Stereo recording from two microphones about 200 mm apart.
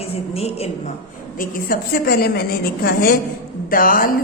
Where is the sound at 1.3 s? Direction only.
50° left (ahead or behind).